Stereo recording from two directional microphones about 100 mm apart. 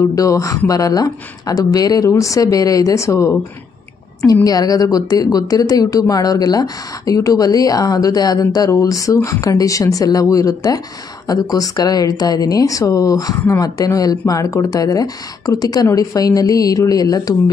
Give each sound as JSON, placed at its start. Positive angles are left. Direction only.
{"t": 0.1, "sound": "speech", "side_deg": 35}
{"t": 4.5, "sound": "speech", "side_deg": 40}